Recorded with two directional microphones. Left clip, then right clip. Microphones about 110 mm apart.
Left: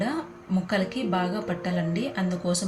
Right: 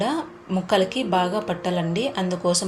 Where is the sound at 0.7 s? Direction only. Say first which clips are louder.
Right 7 dB; 35° right (ahead or behind).